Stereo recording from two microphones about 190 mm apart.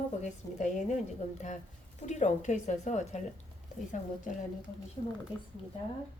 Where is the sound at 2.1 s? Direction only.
40° left (ahead or behind).